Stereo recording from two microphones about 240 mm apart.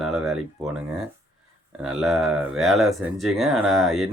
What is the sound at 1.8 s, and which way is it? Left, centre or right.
Speech, centre.